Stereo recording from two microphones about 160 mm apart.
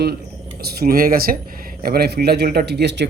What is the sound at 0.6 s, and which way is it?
A man's voice, 75° right (ahead or behind).